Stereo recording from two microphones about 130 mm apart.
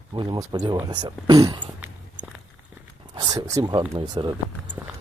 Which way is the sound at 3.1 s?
30° right (ahead or behind).